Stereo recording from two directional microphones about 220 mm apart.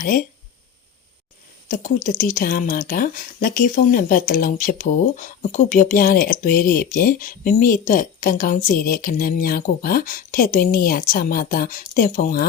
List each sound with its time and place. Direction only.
2.0 s a woman's voice: 40° left (ahead or behind)